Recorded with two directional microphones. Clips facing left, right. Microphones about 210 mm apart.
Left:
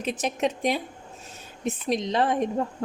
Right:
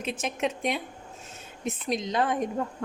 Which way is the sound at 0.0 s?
35° left (ahead or behind).